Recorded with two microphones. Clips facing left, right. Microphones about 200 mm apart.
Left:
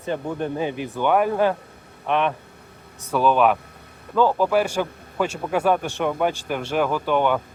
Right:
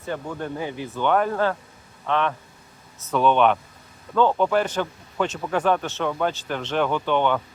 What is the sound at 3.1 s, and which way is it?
Speech, 5° left (ahead or behind).